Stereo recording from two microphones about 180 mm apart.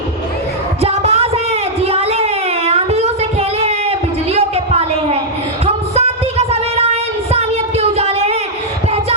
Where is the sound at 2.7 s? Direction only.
35° right (ahead or behind).